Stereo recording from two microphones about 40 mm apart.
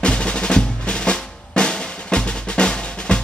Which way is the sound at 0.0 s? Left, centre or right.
Left.